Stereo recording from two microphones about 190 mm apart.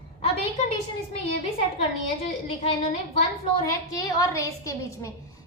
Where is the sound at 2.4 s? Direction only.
30° left (ahead or behind).